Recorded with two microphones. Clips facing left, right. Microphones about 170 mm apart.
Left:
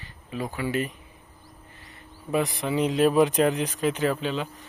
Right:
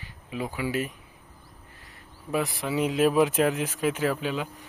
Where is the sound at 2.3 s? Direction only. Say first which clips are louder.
Left 2 dB; centre (ahead or behind).